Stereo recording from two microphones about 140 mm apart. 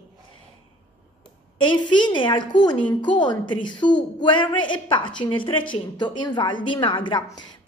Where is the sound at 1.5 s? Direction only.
35° left (ahead or behind).